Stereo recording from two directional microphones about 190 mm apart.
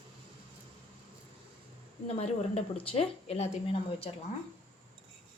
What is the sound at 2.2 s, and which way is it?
Speech, 35° left (ahead or behind).